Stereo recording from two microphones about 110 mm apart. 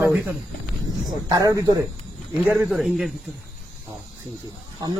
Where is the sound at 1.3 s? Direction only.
35° right (ahead or behind).